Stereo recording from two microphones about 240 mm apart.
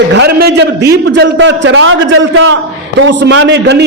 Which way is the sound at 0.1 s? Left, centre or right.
Right.